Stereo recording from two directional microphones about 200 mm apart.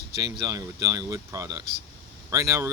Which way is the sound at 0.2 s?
15° right (ahead or behind).